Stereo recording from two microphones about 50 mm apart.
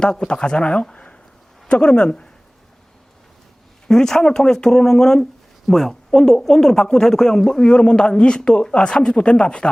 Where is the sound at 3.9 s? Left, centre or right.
Centre.